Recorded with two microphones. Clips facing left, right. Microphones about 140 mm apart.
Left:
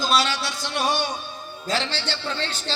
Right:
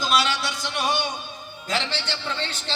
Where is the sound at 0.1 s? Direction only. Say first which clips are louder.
Right 1 dB; 30° left (ahead or behind).